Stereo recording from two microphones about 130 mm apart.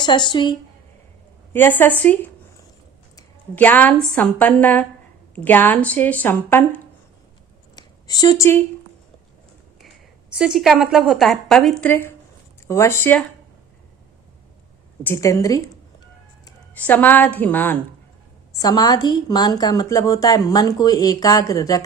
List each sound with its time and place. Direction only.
0.0 s a woman's voice: 35° left (ahead or behind)
1.5 s speech: 15° left (ahead or behind)
3.5 s speech: 15° left (ahead or behind)
7.8 s speech: 30° left (ahead or behind)
10.3 s a woman's voice: 5° right (ahead or behind)
11.9 s a woman's voice: 15° left (ahead or behind)
15.0 s a woman's voice: 20° left (ahead or behind)
16.7 s speech: 15° left (ahead or behind)
18.5 s a woman's voice: 30° left (ahead or behind)